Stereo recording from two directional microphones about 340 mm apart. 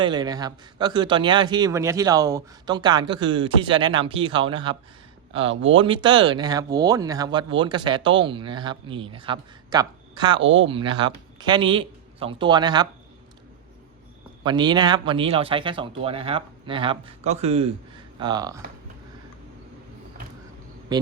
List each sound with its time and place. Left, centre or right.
0.0 s a man's voice: centre
10.4 s speech: right
10.7 s a man's voice: centre
14.4 s a man's voice: centre
20.9 s speech: centre